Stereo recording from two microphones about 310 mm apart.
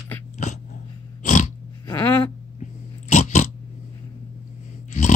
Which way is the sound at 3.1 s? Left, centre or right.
Left.